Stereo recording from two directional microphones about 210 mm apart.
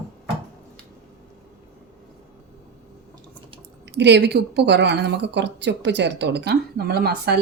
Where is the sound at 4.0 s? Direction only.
55° right (ahead or behind).